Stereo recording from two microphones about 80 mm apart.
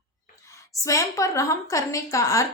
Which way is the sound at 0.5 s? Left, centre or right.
Left.